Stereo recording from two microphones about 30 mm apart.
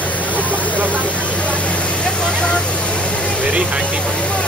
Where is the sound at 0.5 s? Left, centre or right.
Right.